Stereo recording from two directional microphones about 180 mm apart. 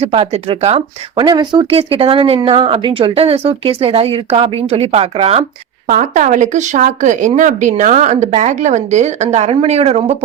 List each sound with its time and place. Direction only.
0.0 s a woman's voice: 35° right (ahead or behind)
1.3 s a woman's voice: 25° right (ahead or behind)
5.9 s a woman's voice: 45° right (ahead or behind)